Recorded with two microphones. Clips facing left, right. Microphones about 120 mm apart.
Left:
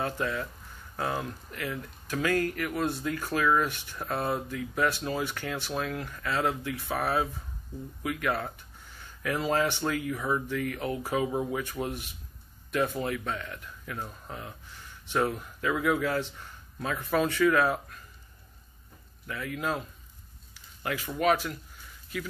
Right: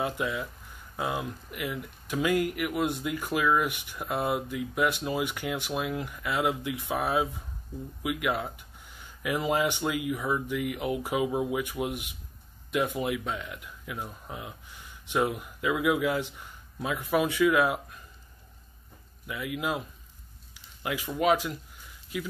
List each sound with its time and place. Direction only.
0.0 s speech: 10° right (ahead or behind)
19.2 s speech: 15° right (ahead or behind)